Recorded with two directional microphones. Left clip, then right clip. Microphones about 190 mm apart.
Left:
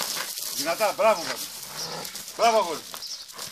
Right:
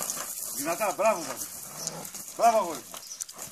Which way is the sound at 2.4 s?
30° left (ahead or behind).